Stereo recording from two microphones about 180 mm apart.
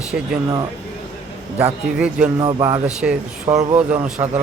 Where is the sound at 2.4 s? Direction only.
25° right (ahead or behind).